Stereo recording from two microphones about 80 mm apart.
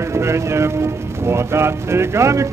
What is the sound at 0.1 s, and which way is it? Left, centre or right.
Speech, right.